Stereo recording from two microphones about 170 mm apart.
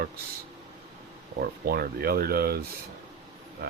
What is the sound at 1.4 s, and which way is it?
Speech, 65° right (ahead or behind).